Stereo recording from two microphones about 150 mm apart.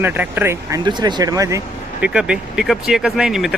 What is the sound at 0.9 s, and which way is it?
Speech, 30° right (ahead or behind).